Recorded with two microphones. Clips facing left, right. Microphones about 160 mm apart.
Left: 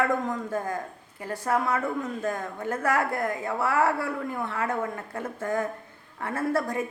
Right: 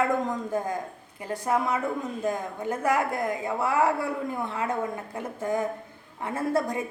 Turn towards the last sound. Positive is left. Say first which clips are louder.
# even
turn(degrees=-15)  # may be behind; listen again after turning